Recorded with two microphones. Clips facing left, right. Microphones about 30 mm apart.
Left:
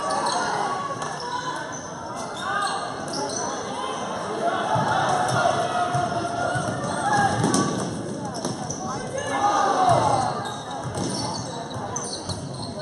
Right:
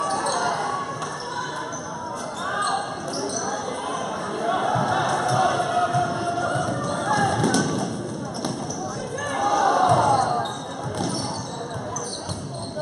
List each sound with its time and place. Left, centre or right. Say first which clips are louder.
0.0 s basketball bounce: even; centre
4.4 s a sound: right 1 dB; centre
5.9 s music: right 1 dB; centre
9.3 s basketball bounce: right 1 dB; centre